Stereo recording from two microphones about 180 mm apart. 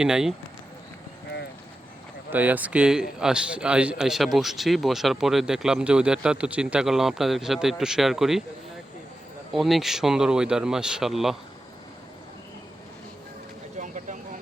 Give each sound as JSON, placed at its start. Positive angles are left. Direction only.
{"t": 0.0, "sound": "a man's voice", "side_deg": -5}
{"t": 2.3, "sound": "a man's voice", "side_deg": -10}
{"t": 9.5, "sound": "a man's voice", "side_deg": 0}
{"t": 13.7, "sound": "vehicle", "side_deg": -45}